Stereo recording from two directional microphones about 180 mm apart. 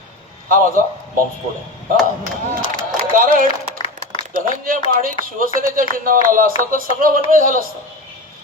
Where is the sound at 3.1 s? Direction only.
50° right (ahead or behind).